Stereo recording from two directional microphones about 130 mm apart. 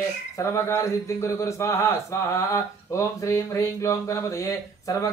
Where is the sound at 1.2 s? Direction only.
20° left (ahead or behind).